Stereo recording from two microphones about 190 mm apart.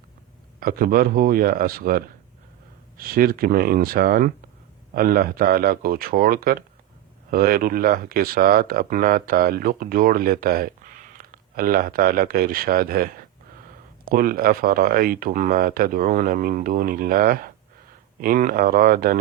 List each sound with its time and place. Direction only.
0.6 s speech: 50° right (ahead or behind)